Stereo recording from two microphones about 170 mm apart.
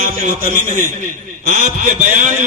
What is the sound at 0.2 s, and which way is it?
A man's voice, 50° right (ahead or behind).